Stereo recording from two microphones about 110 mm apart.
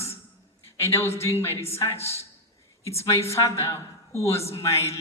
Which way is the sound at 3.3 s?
25° left (ahead or behind).